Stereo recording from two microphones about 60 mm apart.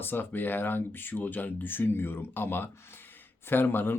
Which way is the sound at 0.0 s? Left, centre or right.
Left.